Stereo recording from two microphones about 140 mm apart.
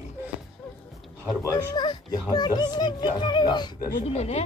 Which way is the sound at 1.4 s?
25° left (ahead or behind).